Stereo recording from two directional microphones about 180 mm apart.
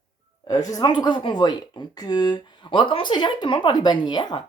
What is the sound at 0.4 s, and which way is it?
Speech, 20° left (ahead or behind).